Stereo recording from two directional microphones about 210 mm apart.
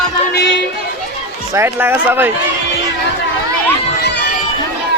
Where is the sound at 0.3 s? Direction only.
60° left (ahead or behind).